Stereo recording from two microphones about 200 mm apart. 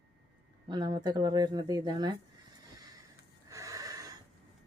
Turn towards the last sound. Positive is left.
turn(degrees=-15)  # may be behind; listen again after turning